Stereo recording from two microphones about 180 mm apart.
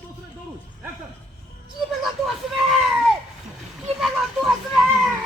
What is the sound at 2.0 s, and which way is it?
Speech, centre (ahead or behind).